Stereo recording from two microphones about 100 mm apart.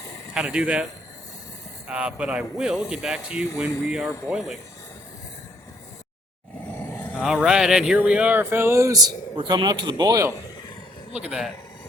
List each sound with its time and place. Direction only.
0.3 s speech: 10° right (ahead or behind)
1.9 s speech: 10° right (ahead or behind)
6.8 s vehicle: 20° left (ahead or behind)
7.1 s speech: 5° right (ahead or behind); by 9.0 s 30° right (ahead or behind)
9.0 s a man's voice: 50° right (ahead or behind)
9.6 s speech: 40° right (ahead or behind)
11.1 s speech: 10° right (ahead or behind)